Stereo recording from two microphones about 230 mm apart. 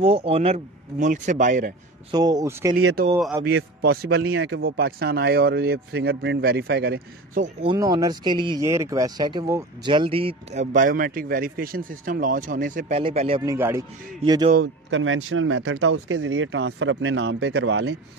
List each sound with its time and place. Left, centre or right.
0.0 s speech: right
2.0 s a man's voice: centre
3.4 s speech: right
4.4 s speech: right
4.6 s speech: right
7.7 s speech: centre
13.4 s a man's voice: centre
14.6 s speech: right